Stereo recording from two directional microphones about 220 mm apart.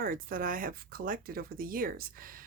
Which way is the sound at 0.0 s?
40° right (ahead or behind).